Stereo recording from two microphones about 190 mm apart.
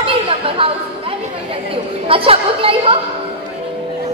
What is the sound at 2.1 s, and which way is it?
Chatter, 30° right (ahead or behind).